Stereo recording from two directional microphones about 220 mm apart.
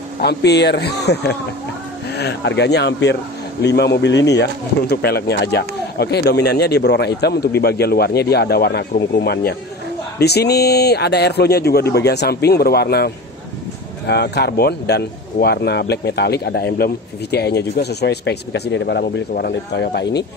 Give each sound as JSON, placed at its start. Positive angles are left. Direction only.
{"t": 0.2, "sound": "speech", "side_deg": 50}